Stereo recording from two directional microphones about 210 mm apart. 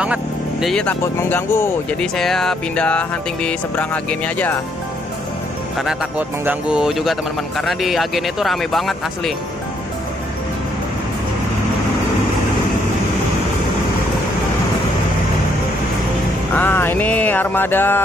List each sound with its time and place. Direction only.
0.0 s speech: 5° right (ahead or behind)
5.8 s speech: 5° right (ahead or behind)
16.5 s music: 10° left (ahead or behind)